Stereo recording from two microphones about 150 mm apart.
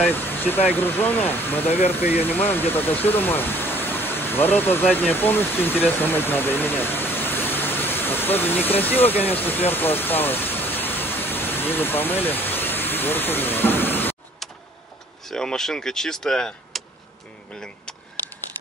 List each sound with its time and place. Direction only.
0.0 s speech: 15° left (ahead or behind)
9.1 s speech: 40° left (ahead or behind)
9.4 s pink noise: 15° left (ahead or behind)
15.2 s speech: 5° left (ahead or behind)